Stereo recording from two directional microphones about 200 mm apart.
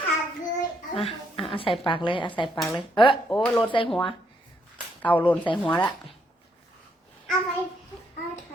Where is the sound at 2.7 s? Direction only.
25° left (ahead or behind).